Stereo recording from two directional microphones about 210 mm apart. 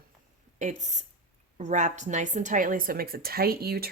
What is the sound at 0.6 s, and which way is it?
A woman's voice, 35° right (ahead or behind).